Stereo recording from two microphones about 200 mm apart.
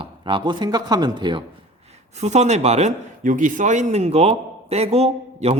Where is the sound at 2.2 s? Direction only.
35° right (ahead or behind).